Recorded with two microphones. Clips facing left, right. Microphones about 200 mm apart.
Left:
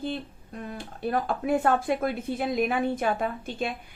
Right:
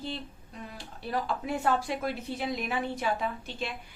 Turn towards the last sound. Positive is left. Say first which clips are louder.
# left 5 dB
turn(degrees=50)  # may be behind; listen again after turning